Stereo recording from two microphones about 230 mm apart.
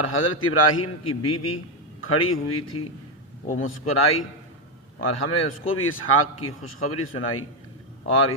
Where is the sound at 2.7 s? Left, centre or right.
Left.